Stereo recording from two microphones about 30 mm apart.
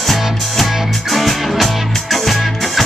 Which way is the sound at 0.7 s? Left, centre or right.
Centre.